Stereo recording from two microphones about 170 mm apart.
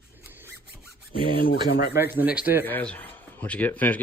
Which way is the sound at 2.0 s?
10° right (ahead or behind).